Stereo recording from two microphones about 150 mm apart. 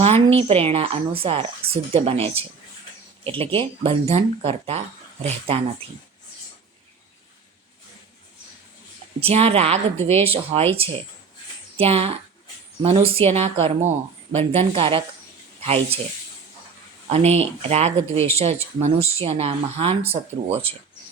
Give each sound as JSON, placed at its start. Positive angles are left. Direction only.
{"t": 0.0, "sound": "a woman's voice", "side_deg": -40}
{"t": 9.2, "sound": "a woman's voice", "side_deg": -40}
{"t": 11.8, "sound": "speech", "side_deg": -45}
{"t": 17.1, "sound": "speech", "side_deg": -45}